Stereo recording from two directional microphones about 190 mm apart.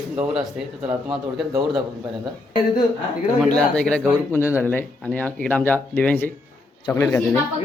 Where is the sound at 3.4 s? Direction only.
5° left (ahead or behind).